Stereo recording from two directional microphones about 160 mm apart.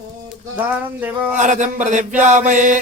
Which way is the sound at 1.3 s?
50° right (ahead or behind).